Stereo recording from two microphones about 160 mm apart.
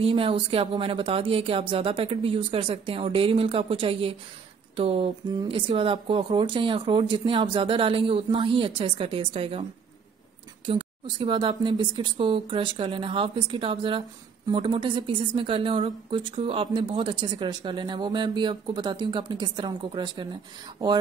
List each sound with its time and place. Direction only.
0.0 s speech: 35° right (ahead or behind)
10.7 s a woman's voice: 30° right (ahead or behind)